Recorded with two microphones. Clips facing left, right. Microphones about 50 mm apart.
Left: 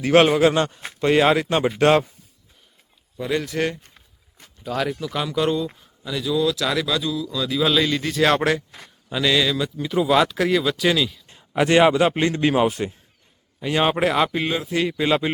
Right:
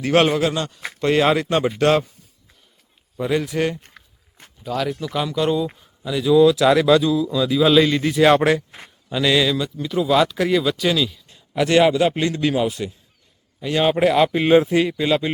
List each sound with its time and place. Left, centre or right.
0.0 s speech: centre
0.3 s a man's voice: left
0.9 s a man's voice: centre
3.2 s speech: centre
4.0 s walk: right
4.6 s speech: centre
9.7 s speech: centre
11.3 s a man's voice: left
13.6 s a man's voice: centre
14.0 s speech: centre
14.5 s a man's voice: right
14.9 s a man's voice: centre